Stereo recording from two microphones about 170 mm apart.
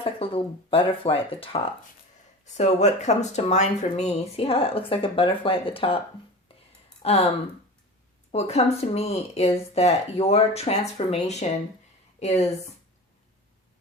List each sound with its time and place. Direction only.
0.0 s speech: 35° left (ahead or behind)
2.4 s speech: 45° left (ahead or behind)
7.0 s speech: 35° left (ahead or behind)
8.3 s speech: 40° left (ahead or behind)